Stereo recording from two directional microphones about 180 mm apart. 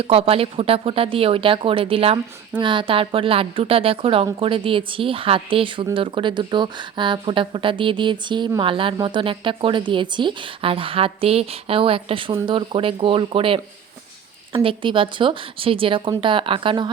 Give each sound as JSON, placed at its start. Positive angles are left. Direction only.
{"t": 0.0, "sound": "a woman's voice", "side_deg": -30}